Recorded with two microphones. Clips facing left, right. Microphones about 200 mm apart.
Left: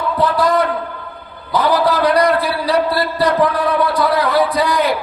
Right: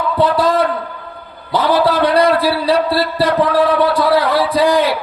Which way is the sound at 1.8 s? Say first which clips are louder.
Right 3 dB; 30° right (ahead or behind).